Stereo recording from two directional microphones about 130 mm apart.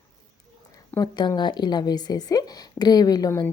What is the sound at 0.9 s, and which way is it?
A woman's voice, 35° left (ahead or behind).